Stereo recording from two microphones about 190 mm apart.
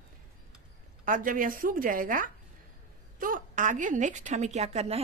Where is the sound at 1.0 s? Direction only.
45° right (ahead or behind).